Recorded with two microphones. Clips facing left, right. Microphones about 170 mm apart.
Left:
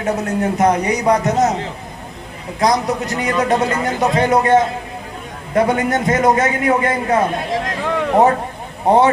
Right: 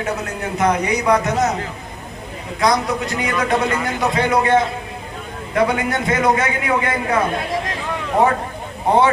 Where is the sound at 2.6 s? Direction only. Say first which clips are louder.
Left 2 dB; 40° left (ahead or behind).